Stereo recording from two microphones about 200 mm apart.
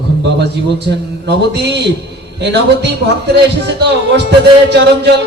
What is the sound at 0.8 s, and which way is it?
A man's voice, 55° right (ahead or behind).